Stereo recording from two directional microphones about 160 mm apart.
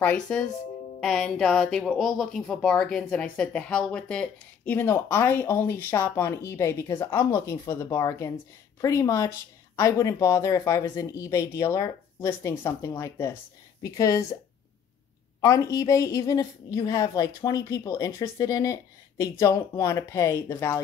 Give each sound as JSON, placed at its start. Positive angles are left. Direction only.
{"t": 0.0, "sound": "a woman's voice", "side_deg": 5}
{"t": 15.4, "sound": "a woman's voice", "side_deg": 20}